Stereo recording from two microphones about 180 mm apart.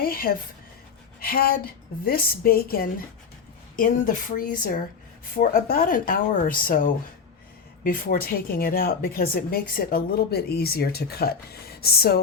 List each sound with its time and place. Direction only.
0.0 s a woman's voice: 55° left (ahead or behind)